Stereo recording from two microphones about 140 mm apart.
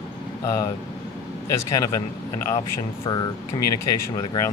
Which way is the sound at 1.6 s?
25° left (ahead or behind).